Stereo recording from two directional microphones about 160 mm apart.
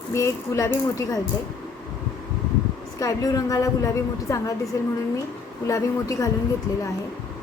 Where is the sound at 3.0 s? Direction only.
20° left (ahead or behind).